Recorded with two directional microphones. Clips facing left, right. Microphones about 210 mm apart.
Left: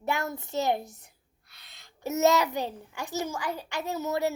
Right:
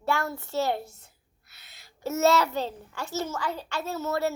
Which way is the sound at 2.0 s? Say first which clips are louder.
Right 1 dB; 15° left (ahead or behind).